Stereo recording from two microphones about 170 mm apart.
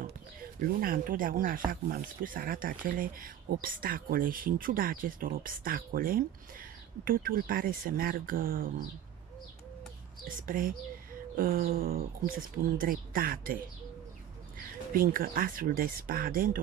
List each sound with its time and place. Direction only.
0.6 s speech: 55° right (ahead or behind)
10.2 s speech: 55° right (ahead or behind)
14.6 s speech: 55° right (ahead or behind)